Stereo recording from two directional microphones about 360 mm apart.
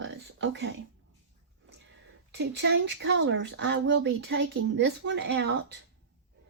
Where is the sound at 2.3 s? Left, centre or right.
Right.